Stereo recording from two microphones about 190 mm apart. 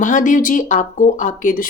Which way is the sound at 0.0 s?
45° left (ahead or behind).